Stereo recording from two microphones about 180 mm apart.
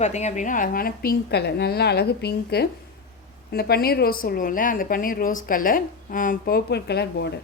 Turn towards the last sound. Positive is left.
turn(degrees=65)  # may be behind; listen again after turning